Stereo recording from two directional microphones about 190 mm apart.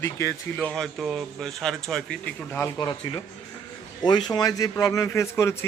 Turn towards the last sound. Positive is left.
turn(degrees=15)  # may be behind; listen again after turning